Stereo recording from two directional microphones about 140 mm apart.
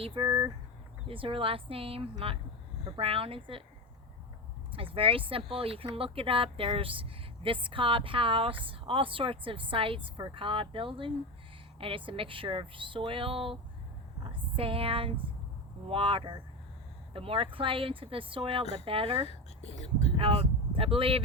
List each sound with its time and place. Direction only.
0.0 s speech: 40° right (ahead or behind)
4.7 s speech: 40° right (ahead or behind)
19.8 s speech: 50° left (ahead or behind)
20.1 s speech: 45° right (ahead or behind)